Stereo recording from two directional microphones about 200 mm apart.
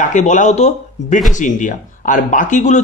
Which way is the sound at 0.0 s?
35° left (ahead or behind).